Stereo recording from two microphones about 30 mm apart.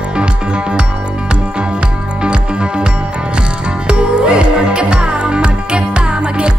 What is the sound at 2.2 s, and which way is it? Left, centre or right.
Music, right.